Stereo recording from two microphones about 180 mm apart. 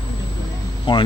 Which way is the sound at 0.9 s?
30° left (ahead or behind).